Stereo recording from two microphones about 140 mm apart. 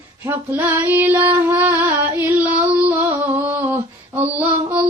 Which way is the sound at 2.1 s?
10° right (ahead or behind).